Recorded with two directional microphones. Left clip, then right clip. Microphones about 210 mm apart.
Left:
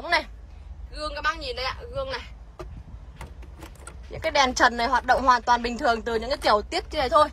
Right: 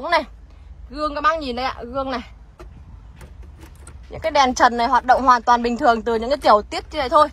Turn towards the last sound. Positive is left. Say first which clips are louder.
# right 4 dB
turn(degrees=5)  # may be behind; listen again after turning